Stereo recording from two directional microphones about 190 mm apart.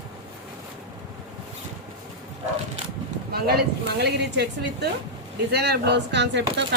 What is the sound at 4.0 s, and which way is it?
Speech, 60° right (ahead or behind).